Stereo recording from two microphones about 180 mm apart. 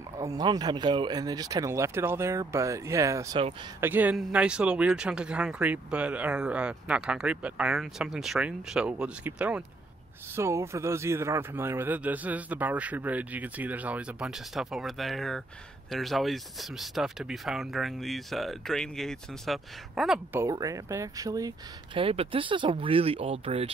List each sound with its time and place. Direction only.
0.2 s speech: 20° right (ahead or behind); by 20.2 s centre (ahead or behind)
20.3 s speech: 20° right (ahead or behind); by 23.7 s 35° right (ahead or behind)